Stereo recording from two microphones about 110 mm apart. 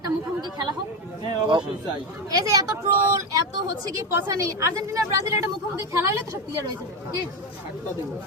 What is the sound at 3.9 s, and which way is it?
A woman's voice, 30° right (ahead or behind).